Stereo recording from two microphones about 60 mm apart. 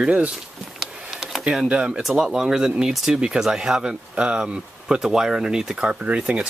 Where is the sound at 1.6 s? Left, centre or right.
Centre.